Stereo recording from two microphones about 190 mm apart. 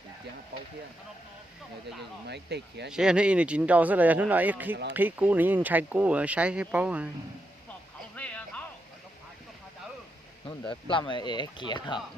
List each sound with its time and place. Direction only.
2.2 s speech: 60° right (ahead or behind)
2.9 s speech: 5° right (ahead or behind)
8.1 s music: 5° left (ahead or behind)
10.7 s speech: 25° left (ahead or behind)